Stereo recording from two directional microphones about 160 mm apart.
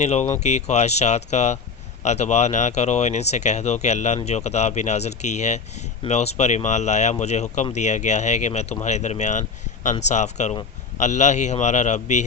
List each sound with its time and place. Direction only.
0.0 s speech: 45° left (ahead or behind)